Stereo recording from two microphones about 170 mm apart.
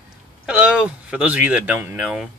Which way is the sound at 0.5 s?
5° right (ahead or behind).